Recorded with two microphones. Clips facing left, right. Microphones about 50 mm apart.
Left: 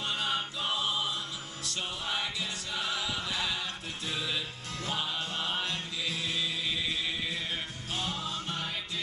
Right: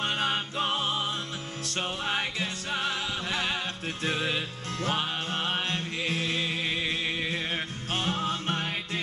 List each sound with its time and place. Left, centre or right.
0.0 s music: right